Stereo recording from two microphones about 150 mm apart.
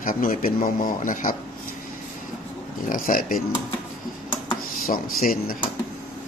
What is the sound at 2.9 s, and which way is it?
Speech, 70° left (ahead or behind).